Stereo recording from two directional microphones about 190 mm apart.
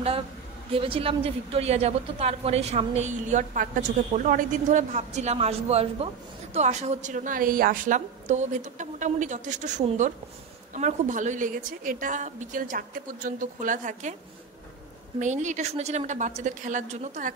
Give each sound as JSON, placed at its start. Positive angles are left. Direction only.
{"t": 0.7, "sound": "a woman's voice", "side_deg": -30}
{"t": 15.1, "sound": "a woman's voice", "side_deg": -40}